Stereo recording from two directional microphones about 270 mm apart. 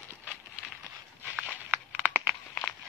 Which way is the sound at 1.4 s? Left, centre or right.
Centre.